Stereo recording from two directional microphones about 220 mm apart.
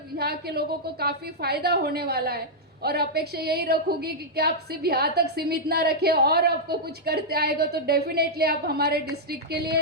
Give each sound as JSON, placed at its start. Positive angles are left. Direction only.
{"t": 0.2, "sound": "a woman's voice", "side_deg": -45}